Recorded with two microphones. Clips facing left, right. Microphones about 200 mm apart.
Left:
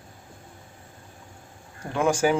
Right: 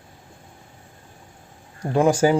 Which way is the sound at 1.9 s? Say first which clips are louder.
Right 5 dB; 35° right (ahead or behind).